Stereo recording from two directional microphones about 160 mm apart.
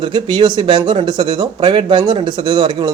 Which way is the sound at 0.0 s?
30° right (ahead or behind).